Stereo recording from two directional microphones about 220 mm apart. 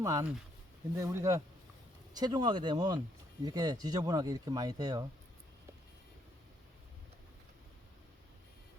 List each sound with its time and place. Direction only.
0.0 s speech: 15° right (ahead or behind)